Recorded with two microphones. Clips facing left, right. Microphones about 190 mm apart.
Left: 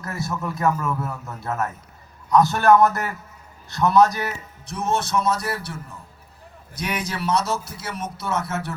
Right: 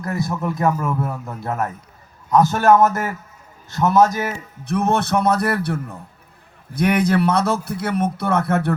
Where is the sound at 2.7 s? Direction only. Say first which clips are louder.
Right 1 dB; 20° right (ahead or behind).